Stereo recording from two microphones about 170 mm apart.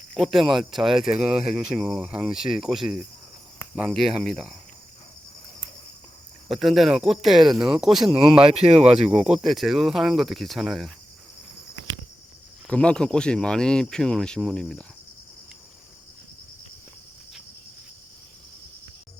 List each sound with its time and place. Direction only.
0.1 s speech: centre (ahead or behind)
6.5 s speech: centre (ahead or behind)
8.5 s speech: 35° right (ahead or behind)
9.0 s speech: 5° right (ahead or behind)
12.6 s speech: 5° left (ahead or behind)